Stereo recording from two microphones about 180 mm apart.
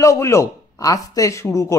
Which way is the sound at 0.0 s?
15° left (ahead or behind).